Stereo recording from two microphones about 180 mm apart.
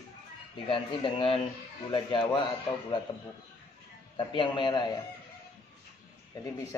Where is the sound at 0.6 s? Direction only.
30° left (ahead or behind).